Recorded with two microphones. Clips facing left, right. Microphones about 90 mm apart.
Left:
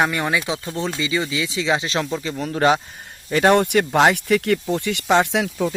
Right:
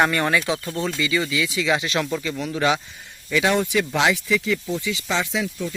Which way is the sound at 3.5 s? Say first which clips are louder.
Left 5 dB; 60° left (ahead or behind).